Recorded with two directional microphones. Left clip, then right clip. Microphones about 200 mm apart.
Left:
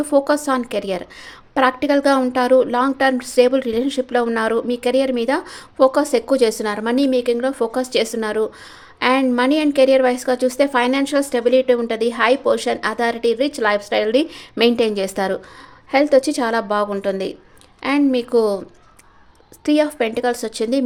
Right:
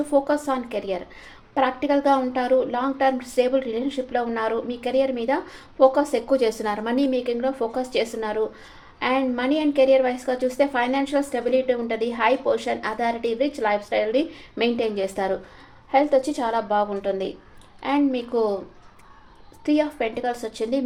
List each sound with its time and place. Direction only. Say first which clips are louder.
0.1 s speech: left 5 dB; 50° left (ahead or behind)
19.6 s speech: left 5 dB; 50° left (ahead or behind)